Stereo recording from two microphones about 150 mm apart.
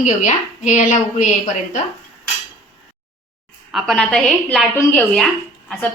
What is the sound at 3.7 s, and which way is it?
A woman's voice, centre (ahead or behind).